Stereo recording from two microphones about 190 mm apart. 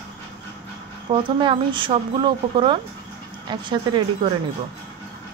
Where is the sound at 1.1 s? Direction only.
25° right (ahead or behind).